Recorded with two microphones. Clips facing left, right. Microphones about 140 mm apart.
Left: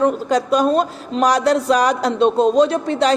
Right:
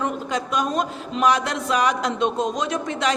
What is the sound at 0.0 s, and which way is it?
Speech, 35° left (ahead or behind).